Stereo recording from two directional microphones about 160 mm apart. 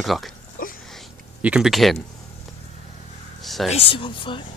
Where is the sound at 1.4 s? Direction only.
5° right (ahead or behind).